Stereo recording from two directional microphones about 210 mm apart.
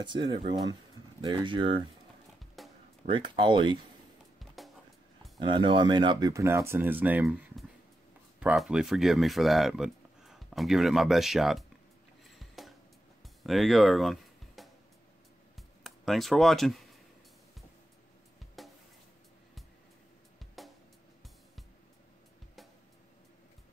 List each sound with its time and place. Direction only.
0.0 s speech: 20° right (ahead or behind)
2.6 s music: centre (ahead or behind)
3.1 s speech: 25° right (ahead or behind)
5.4 s speech: 20° right (ahead or behind); by 11.6 s centre (ahead or behind)
12.4 s a sound: centre (ahead or behind)
13.4 s music: centre (ahead or behind)
15.5 s a sound: centre (ahead or behind)
20.6 s music: centre (ahead or behind)